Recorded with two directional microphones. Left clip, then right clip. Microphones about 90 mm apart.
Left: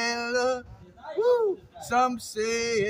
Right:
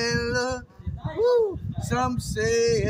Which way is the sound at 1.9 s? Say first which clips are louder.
Left 2 dB; 20° left (ahead or behind).